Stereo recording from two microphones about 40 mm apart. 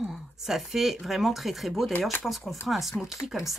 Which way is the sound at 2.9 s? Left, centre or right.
Centre.